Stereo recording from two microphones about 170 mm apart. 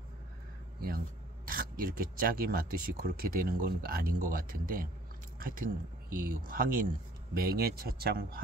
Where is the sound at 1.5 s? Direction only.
55° right (ahead or behind).